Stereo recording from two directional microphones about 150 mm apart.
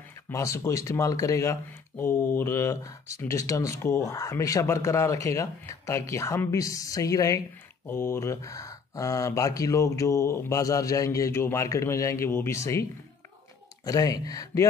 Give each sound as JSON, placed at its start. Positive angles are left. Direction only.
{"t": 0.1, "sound": "speech", "side_deg": 20}
{"t": 13.8, "sound": "speech", "side_deg": 25}